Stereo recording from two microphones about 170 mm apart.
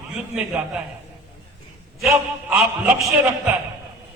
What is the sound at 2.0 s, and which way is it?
Speech, 5° right (ahead or behind).